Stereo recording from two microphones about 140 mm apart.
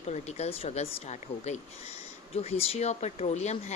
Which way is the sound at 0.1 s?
50° left (ahead or behind).